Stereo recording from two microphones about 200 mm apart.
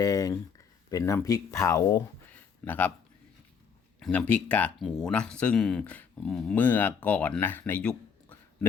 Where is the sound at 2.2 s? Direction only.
10° left (ahead or behind).